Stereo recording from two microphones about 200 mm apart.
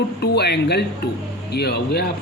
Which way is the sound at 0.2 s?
55° left (ahead or behind).